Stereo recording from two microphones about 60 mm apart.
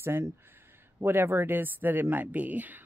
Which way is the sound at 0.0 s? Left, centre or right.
Right.